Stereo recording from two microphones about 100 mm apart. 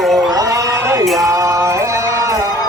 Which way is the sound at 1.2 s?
30° right (ahead or behind).